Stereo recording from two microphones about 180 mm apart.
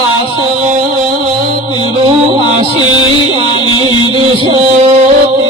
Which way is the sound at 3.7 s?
25° left (ahead or behind).